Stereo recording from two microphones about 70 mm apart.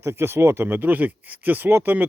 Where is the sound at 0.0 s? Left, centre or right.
Right.